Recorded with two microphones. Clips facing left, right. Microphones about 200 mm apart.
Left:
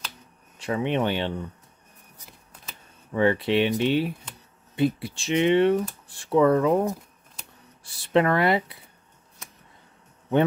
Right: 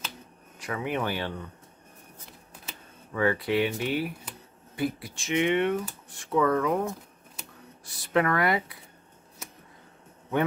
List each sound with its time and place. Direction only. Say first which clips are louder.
0.6 s speech: left 5 dB; 25° left (ahead or behind)
3.1 s speech: left 4 dB; 25° left (ahead or behind)